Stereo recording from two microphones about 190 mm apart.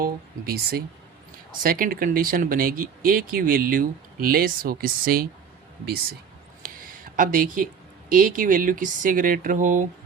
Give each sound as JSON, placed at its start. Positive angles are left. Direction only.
{"t": 0.0, "sound": "speech", "side_deg": -55}
{"t": 6.6, "sound": "a sound", "side_deg": -45}
{"t": 8.1, "sound": "speech", "side_deg": -45}